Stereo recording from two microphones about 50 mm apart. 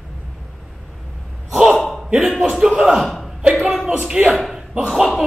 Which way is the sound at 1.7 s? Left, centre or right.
Centre.